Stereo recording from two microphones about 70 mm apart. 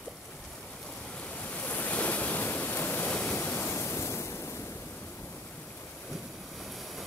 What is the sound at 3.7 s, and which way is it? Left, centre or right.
Waves, left.